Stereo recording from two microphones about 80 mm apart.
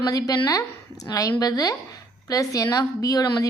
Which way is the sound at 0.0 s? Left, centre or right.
Left.